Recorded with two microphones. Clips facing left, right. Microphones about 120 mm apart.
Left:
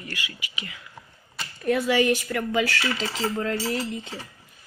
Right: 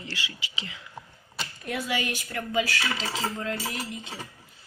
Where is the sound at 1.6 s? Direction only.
60° left (ahead or behind).